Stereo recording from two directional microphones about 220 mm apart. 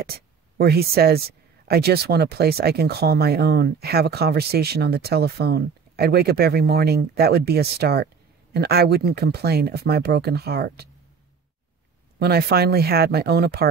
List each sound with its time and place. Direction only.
0.0 s speech: 45° right (ahead or behind)
12.2 s speech: 45° right (ahead or behind)